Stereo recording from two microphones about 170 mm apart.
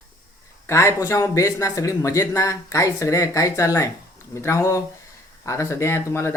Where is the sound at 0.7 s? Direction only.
15° left (ahead or behind).